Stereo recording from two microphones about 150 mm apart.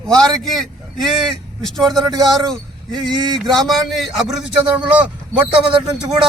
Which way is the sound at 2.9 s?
25° right (ahead or behind).